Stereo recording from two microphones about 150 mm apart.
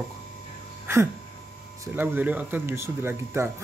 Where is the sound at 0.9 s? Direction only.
15° right (ahead or behind).